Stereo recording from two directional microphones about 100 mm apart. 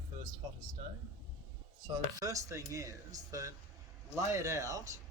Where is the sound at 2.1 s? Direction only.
35° right (ahead or behind).